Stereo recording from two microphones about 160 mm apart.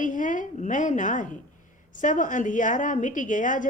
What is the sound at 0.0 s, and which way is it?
A woman's voice, 55° left (ahead or behind).